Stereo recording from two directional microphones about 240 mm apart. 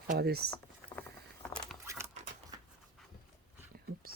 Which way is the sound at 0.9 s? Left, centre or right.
Centre.